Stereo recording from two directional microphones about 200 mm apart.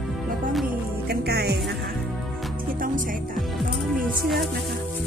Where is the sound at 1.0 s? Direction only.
55° right (ahead or behind).